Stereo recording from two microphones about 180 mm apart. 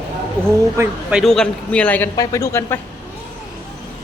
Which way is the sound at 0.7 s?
10° right (ahead or behind).